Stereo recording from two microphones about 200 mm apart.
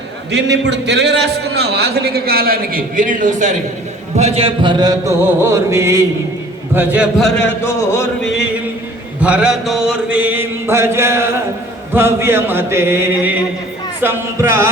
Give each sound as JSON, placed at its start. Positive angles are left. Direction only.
{"t": 0.3, "sound": "a man's voice", "side_deg": -60}
{"t": 4.2, "sound": "mantra", "side_deg": -30}
{"t": 7.3, "sound": "a sound", "side_deg": 10}
{"t": 9.2, "sound": "mantra", "side_deg": -5}